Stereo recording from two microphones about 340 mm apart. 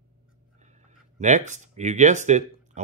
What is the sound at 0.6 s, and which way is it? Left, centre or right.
Speech, right.